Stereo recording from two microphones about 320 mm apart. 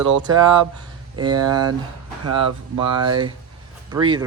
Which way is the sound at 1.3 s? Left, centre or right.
Right.